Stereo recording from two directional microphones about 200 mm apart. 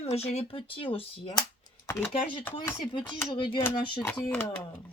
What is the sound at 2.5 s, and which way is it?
Speech, 25° left (ahead or behind).